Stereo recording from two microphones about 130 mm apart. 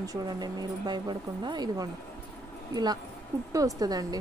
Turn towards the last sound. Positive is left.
turn(degrees=-30)  # may be behind; listen again after turning